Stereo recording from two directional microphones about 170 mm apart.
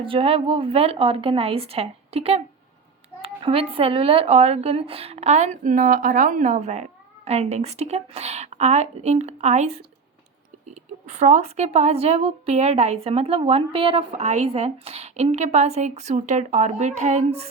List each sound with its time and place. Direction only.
0.0 s a woman's voice: 30° right (ahead or behind)
11.0 s a woman's voice: 40° right (ahead or behind)